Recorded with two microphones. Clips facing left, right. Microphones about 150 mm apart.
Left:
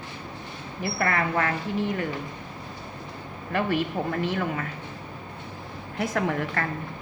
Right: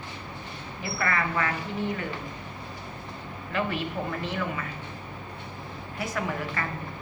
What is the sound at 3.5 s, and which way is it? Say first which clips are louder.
A woman's voice: left 4 dB; 50° left (ahead or behind).